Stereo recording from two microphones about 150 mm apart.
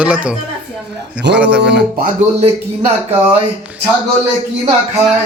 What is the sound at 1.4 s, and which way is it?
Speech, 5° right (ahead or behind).